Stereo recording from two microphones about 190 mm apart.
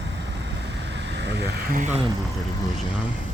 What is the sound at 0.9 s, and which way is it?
Vehicle, 65° right (ahead or behind).